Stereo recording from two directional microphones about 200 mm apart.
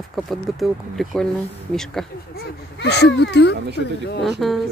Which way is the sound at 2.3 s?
55° left (ahead or behind).